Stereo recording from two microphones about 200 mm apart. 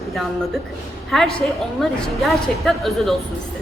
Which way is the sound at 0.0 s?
Centre (ahead or behind).